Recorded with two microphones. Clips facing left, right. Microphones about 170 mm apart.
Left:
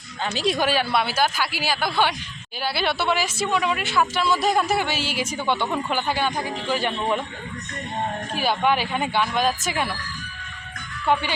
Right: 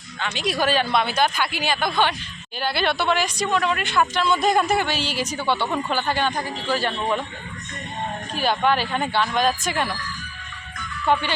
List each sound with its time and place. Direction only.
0.2 s speech: 35° left (ahead or behind)
0.6 s speech: 10° left (ahead or behind)
8.4 s speech: 10° left (ahead or behind)